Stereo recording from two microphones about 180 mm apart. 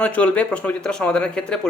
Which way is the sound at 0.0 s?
10° left (ahead or behind).